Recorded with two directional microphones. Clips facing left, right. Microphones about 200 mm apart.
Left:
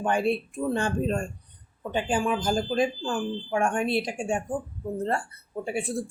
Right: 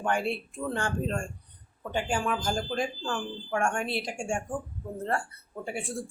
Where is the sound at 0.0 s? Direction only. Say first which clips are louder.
Left 4 dB; 20° left (ahead or behind).